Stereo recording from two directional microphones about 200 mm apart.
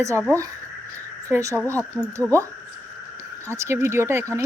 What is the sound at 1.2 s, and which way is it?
Speech, 15° right (ahead or behind).